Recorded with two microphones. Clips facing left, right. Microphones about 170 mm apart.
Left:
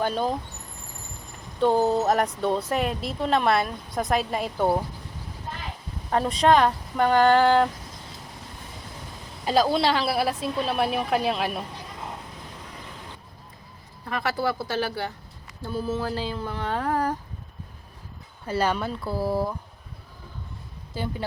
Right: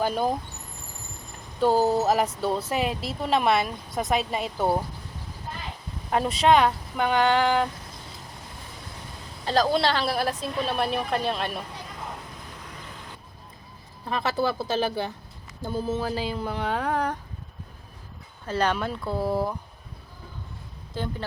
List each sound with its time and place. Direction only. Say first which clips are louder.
0.0 s speech: even; 10° right (ahead or behind)
1.6 s speech: even; 5° right (ahead or behind)
6.1 s speech: left 1 dB; 10° right (ahead or behind)
9.4 s a woman's voice: left 1 dB; 10° left (ahead or behind)
14.1 s speech: right 1 dB; 25° right (ahead or behind)
16.7 s speech: left 3 dB; 5° left (ahead or behind)
18.4 s speech: even; 10° left (ahead or behind)
20.9 s speech: left 1 dB; 10° left (ahead or behind)